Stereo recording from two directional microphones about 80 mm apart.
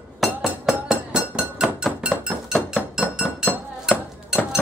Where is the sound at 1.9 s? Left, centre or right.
Centre.